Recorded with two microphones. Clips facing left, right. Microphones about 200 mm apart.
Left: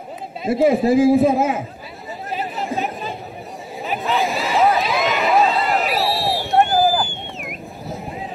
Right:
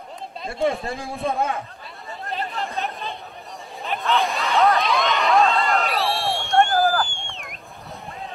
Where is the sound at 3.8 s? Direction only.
5° left (ahead or behind).